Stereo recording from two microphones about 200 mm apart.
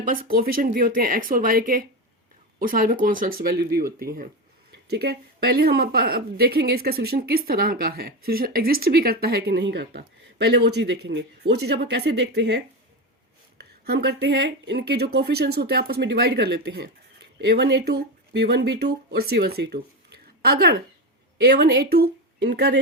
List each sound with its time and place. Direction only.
0.0 s a woman's voice: 45° right (ahead or behind)
13.8 s a woman's voice: 55° right (ahead or behind)